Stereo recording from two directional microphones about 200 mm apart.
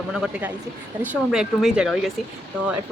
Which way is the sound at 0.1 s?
5° right (ahead or behind).